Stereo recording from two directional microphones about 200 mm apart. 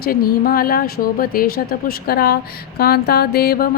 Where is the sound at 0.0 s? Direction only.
50° left (ahead or behind).